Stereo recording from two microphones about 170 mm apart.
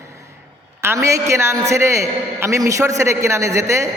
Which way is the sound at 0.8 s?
15° right (ahead or behind).